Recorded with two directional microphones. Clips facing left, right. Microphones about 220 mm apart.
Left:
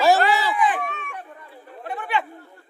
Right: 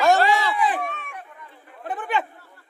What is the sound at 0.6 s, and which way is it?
Speech, 35° right (ahead or behind).